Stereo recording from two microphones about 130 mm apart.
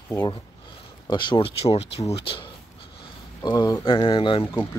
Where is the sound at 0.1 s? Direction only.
30° left (ahead or behind).